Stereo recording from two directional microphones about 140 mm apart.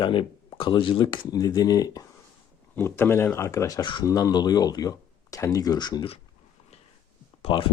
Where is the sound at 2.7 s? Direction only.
15° left (ahead or behind).